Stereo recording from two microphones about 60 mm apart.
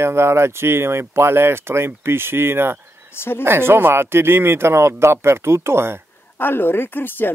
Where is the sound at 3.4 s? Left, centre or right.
Right.